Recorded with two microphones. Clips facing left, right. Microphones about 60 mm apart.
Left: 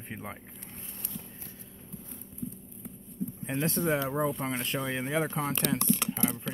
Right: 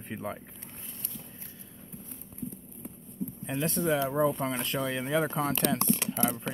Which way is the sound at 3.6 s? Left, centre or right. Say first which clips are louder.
Right 1 dB; left.